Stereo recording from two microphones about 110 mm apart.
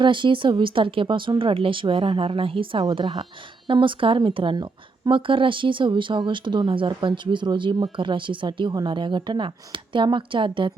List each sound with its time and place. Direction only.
0.0 s speech: 45° right (ahead or behind)